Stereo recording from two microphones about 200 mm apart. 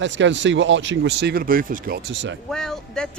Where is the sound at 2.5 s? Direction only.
5° left (ahead or behind).